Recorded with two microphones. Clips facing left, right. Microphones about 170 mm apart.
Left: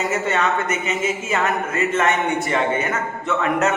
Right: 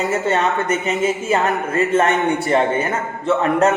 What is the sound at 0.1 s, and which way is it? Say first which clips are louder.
A woman's voice: right 2 dB; 30° right (ahead or behind).